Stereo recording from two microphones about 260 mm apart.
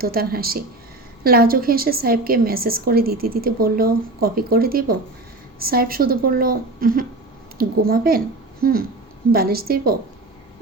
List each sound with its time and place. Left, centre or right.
0.0 s a woman's voice: right